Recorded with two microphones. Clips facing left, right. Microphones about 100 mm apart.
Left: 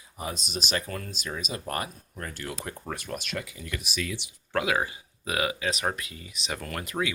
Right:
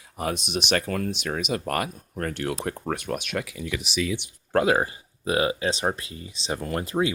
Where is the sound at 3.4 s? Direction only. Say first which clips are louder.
Right 6 dB; 75° right (ahead or behind).